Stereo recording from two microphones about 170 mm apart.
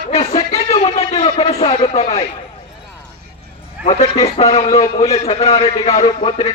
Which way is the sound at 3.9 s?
40° left (ahead or behind).